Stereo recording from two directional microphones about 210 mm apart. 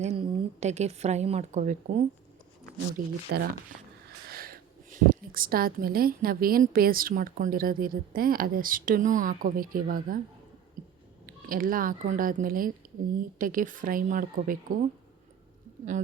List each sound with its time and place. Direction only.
0.0 s a woman's voice: 30° right (ahead or behind)
4.3 s a woman's voice: 45° right (ahead or behind)
11.4 s speech: 40° right (ahead or behind)